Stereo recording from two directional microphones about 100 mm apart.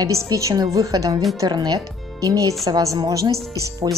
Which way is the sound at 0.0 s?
35° right (ahead or behind).